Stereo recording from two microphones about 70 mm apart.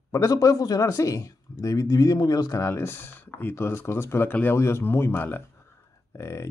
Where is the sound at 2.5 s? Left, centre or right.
Left.